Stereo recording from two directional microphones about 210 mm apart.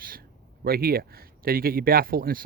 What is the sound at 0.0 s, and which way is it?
Speech, 45° right (ahead or behind).